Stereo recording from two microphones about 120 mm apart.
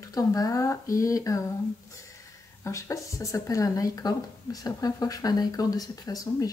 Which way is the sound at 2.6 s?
25° left (ahead or behind).